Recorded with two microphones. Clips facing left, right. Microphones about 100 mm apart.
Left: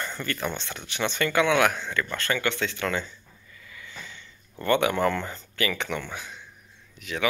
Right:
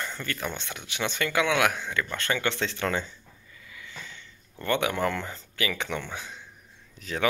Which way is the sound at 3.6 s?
5° right (ahead or behind).